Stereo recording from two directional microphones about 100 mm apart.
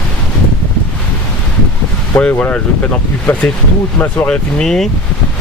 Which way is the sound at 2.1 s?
15° left (ahead or behind).